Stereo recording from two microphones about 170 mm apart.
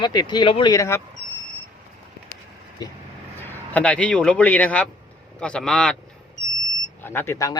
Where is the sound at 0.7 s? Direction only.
15° left (ahead or behind).